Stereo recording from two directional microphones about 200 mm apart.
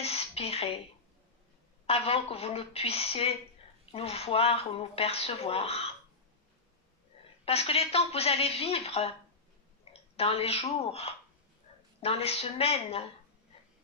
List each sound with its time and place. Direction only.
0.0 s a sound: 30° left (ahead or behind)
1.9 s speech: 30° left (ahead or behind)
7.4 s a woman's voice: 30° left (ahead or behind)
10.1 s a woman's voice: 30° left (ahead or behind)